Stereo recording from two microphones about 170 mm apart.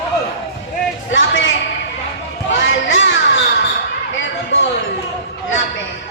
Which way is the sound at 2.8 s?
90° left.